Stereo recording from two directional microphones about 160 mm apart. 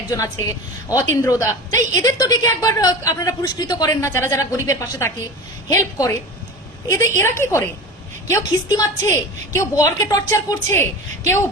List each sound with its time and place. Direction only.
0.9 s a woman's voice: 20° left (ahead or behind)
7.2 s a woman's voice: 15° left (ahead or behind)